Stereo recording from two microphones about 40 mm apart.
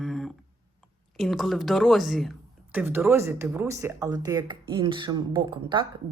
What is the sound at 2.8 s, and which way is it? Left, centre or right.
Speech, right.